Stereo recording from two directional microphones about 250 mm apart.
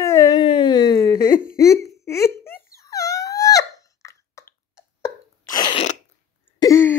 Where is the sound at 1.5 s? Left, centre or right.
Centre.